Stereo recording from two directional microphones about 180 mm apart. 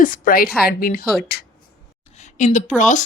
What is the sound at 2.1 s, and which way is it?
Speech, 40° left (ahead or behind).